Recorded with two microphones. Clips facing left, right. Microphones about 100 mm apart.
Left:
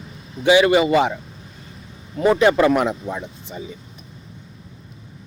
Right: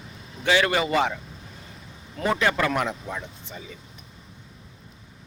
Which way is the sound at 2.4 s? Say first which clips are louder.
Left 8 dB; 20° left (ahead or behind).